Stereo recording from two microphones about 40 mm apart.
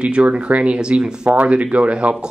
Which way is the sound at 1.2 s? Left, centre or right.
Right.